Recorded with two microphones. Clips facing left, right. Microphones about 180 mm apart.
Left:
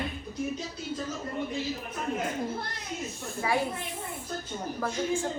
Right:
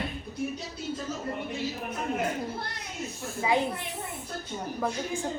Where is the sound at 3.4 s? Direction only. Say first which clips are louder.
Right 2 dB; 20° right (ahead or behind).